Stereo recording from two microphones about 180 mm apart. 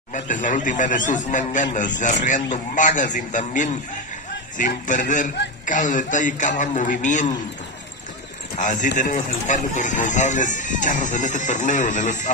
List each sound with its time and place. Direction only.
0.1 s speech: 45° left (ahead or behind)
8.6 s speech: 45° left (ahead or behind)